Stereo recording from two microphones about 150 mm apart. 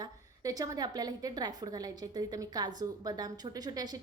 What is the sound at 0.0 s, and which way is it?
A woman's voice, 25° right (ahead or behind).